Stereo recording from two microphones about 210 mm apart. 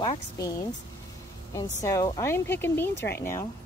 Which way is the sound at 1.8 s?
15° left (ahead or behind).